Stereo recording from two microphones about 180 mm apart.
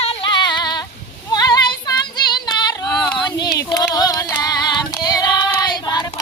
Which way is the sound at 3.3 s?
25° left (ahead or behind).